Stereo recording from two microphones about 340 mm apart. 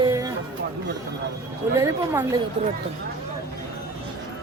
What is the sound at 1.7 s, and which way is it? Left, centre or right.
Speech, centre.